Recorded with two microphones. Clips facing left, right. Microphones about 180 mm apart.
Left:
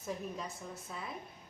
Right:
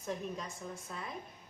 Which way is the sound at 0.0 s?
Centre (ahead or behind).